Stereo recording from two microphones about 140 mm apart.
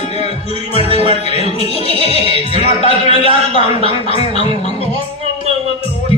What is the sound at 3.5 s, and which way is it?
Speech, 45° left (ahead or behind).